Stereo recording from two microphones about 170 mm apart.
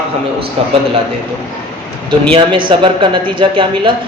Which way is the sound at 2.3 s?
30° right (ahead or behind).